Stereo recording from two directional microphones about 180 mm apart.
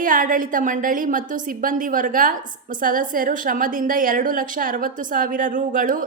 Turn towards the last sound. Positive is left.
turn(degrees=-50)  # may be behind; listen again after turning